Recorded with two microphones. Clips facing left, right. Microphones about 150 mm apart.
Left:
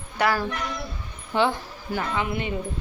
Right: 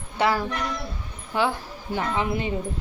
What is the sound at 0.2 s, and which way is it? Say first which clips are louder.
Speech: right 1 dB; 25° right (ahead or behind).